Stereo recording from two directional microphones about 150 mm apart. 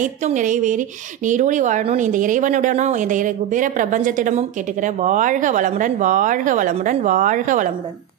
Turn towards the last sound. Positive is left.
turn(degrees=-60)  # may be behind; listen again after turning